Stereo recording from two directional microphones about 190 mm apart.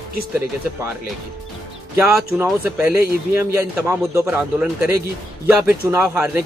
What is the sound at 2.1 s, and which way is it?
Speech, centre (ahead or behind).